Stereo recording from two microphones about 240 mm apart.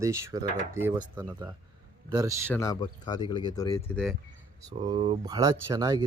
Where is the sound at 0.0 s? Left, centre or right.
Centre.